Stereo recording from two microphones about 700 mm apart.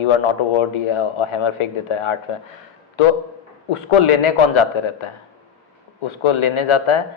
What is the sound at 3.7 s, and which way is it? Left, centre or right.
A man's voice, left.